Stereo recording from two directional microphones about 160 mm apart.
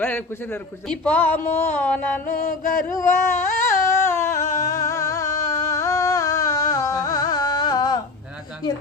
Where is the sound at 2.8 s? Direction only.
15° left (ahead or behind).